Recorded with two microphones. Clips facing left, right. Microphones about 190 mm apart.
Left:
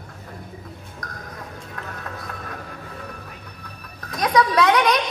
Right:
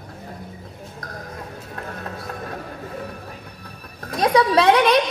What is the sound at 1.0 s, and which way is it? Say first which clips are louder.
Music: right 2 dB; 30° right (ahead or behind).